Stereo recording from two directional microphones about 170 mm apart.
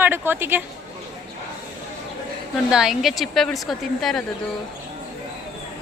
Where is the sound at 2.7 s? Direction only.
5° right (ahead or behind).